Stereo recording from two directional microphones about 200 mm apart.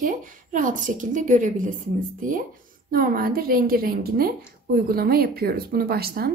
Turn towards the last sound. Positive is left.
turn(degrees=-50)  # may be behind; listen again after turning